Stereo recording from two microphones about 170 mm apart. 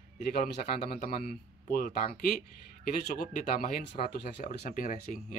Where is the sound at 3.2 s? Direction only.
55° left (ahead or behind).